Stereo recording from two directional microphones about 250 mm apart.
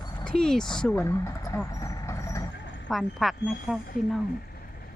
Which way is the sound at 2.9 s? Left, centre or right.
Centre.